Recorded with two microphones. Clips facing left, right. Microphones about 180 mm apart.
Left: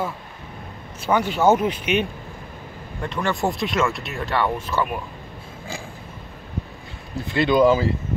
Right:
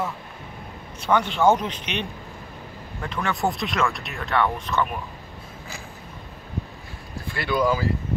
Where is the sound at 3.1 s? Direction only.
Centre (ahead or behind).